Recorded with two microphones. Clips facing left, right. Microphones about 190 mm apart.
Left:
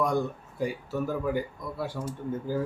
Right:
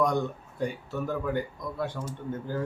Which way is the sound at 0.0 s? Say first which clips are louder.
Right 1 dB; 5° left (ahead or behind).